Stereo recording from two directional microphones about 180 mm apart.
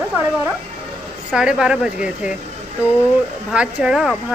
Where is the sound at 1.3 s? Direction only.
5° right (ahead or behind).